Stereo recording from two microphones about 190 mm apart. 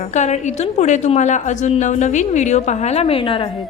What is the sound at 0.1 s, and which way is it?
A woman's voice, 40° left (ahead or behind).